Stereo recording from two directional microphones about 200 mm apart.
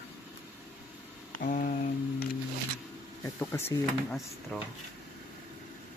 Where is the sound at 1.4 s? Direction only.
40° left (ahead or behind).